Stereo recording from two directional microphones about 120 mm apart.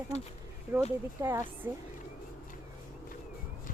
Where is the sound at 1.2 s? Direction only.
25° right (ahead or behind).